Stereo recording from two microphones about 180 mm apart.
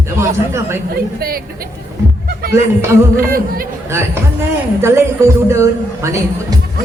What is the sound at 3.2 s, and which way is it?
Speech, 50° right (ahead or behind).